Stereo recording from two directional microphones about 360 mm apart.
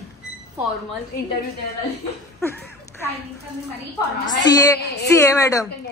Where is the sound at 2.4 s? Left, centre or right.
Centre.